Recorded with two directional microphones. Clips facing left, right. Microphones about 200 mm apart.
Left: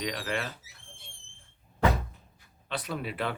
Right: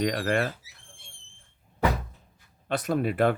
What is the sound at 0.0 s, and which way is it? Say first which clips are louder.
Speech: right 7 dB; 50° right (ahead or behind).